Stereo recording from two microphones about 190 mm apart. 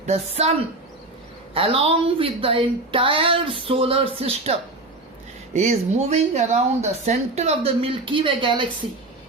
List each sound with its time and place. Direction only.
0.0 s speech: 35° right (ahead or behind)
1.5 s a woman's voice: 30° right (ahead or behind)
5.5 s speech: 40° right (ahead or behind)